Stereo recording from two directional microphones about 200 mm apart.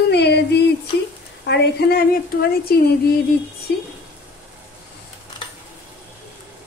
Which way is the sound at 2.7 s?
50° left (ahead or behind).